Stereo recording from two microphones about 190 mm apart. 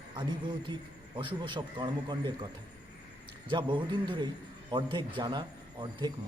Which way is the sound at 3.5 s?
25° right (ahead or behind).